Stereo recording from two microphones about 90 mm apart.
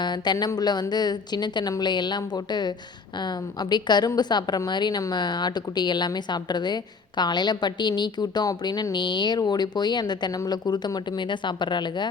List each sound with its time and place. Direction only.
0.0 s a woman's voice: 55° left (ahead or behind)